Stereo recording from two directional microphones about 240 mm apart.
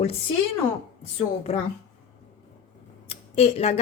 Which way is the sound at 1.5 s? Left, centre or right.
Left.